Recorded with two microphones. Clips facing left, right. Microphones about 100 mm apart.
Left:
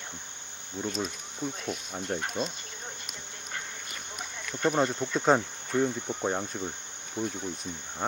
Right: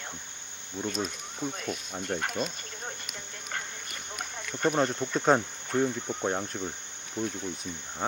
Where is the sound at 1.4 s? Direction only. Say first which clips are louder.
Even; 15° right (ahead or behind).